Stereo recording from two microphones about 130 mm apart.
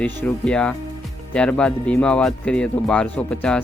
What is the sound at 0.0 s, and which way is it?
Speech, 15° left (ahead or behind).